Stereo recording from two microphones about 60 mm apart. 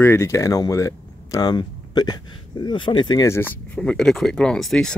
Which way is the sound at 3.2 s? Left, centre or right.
Left.